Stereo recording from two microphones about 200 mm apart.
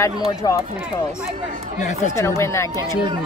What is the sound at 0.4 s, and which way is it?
Speech, 20° left (ahead or behind).